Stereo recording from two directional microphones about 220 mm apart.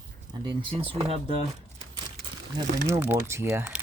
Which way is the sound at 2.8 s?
10° right (ahead or behind).